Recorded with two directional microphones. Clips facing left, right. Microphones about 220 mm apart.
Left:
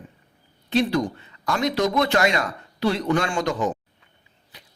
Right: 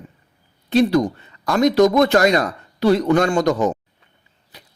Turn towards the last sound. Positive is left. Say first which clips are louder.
# right 7 dB
turn(degrees=-40)  # may be behind; listen again after turning